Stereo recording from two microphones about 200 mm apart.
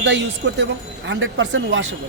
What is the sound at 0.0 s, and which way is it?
A man's voice, 65° right (ahead or behind).